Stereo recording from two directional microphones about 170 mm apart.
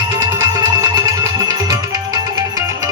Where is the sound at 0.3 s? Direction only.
20° right (ahead or behind).